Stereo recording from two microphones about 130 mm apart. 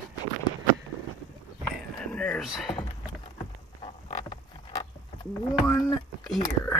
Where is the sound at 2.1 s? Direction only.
10° left (ahead or behind).